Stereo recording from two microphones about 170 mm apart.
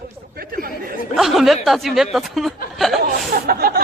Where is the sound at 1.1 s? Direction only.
Centre (ahead or behind).